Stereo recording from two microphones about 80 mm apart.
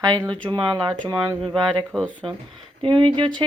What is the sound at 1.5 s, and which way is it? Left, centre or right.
Speech, centre.